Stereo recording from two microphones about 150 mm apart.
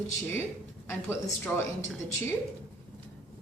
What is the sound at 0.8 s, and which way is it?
Speech, 15° left (ahead or behind).